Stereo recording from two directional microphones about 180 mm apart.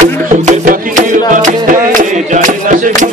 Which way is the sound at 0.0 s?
45° right (ahead or behind).